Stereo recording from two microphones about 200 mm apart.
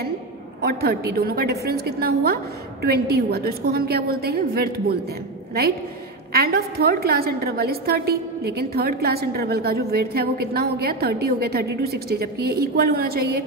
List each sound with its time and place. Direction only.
0.6 s a woman's voice: 50° right (ahead or behind)
6.3 s a woman's voice: 50° right (ahead or behind)